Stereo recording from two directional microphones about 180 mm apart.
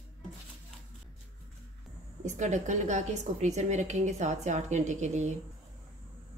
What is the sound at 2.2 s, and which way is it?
A woman's voice, 40° right (ahead or behind).